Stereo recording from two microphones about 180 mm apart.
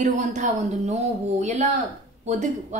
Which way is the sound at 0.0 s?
40° right (ahead or behind).